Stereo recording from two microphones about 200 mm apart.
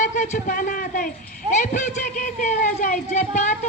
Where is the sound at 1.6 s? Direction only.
35° left (ahead or behind).